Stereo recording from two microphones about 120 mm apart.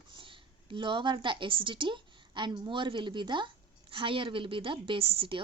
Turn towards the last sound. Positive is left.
turn(degrees=-50)  # may be behind; listen again after turning